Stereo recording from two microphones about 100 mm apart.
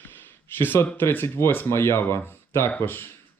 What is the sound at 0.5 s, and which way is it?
Speech, 20° left (ahead or behind).